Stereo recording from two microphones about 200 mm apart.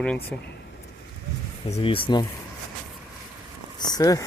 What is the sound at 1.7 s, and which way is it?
Speech, 25° left (ahead or behind).